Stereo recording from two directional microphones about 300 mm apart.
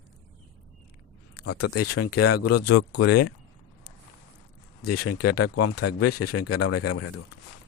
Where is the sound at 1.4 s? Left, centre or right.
Left.